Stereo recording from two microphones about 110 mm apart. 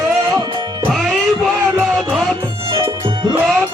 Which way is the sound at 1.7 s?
Centre (ahead or behind).